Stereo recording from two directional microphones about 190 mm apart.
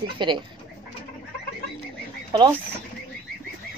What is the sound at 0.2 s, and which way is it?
Speech, 25° right (ahead or behind).